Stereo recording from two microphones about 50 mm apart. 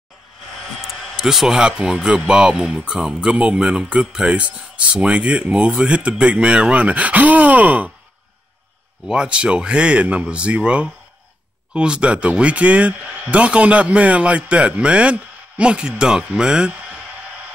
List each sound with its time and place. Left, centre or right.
1.2 s speech: centre; by 7.9 s right
9.0 s speech: centre